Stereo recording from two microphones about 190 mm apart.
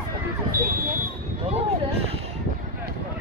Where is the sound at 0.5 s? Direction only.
50° right (ahead or behind).